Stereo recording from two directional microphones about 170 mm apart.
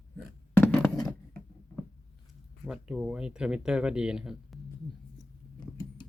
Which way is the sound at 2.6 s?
5° right (ahead or behind).